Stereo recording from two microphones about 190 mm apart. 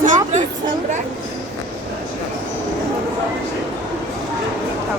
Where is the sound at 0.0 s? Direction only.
40° right (ahead or behind).